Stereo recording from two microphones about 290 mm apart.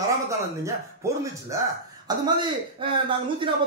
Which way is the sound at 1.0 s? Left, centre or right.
Centre.